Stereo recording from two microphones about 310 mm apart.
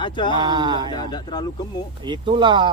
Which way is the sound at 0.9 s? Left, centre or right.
Centre.